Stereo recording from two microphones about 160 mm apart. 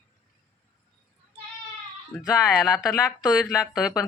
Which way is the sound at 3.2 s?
20° left (ahead or behind).